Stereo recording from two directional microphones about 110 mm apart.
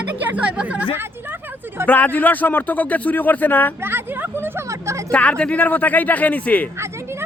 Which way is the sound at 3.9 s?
20° right (ahead or behind).